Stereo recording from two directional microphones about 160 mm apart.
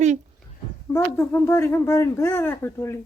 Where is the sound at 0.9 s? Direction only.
15° left (ahead or behind).